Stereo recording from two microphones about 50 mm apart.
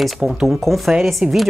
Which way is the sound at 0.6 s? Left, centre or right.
Centre.